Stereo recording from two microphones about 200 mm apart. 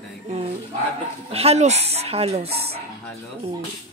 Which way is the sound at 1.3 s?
30° right (ahead or behind).